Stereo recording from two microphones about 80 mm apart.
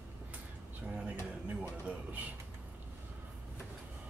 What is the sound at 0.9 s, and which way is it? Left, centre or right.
Speech, centre.